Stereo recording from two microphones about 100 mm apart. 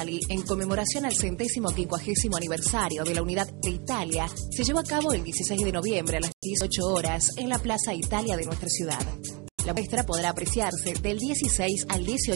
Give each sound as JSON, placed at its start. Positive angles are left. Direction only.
{"t": 0.0, "sound": "speech", "side_deg": -10}